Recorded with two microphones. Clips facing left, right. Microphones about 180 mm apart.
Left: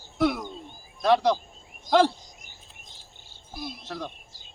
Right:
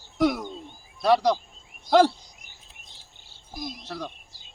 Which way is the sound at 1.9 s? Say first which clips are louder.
Right 2 dB; 45° left (ahead or behind).